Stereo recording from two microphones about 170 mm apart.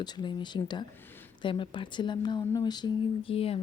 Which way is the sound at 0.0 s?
25° left (ahead or behind).